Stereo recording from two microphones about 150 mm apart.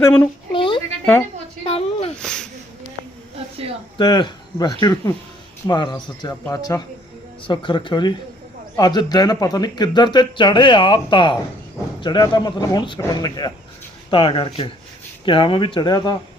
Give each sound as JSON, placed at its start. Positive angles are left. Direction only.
{"t": 0.5, "sound": "a sound", "side_deg": 35}
{"t": 2.2, "sound": "speech", "side_deg": 5}
{"t": 3.9, "sound": "speech", "side_deg": 30}